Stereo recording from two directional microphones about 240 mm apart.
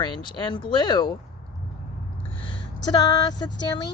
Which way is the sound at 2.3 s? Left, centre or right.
Left.